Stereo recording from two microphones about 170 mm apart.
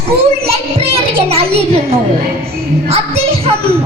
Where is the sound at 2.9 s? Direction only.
35° right (ahead or behind).